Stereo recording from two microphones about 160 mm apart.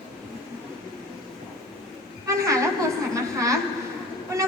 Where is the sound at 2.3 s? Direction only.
20° right (ahead or behind).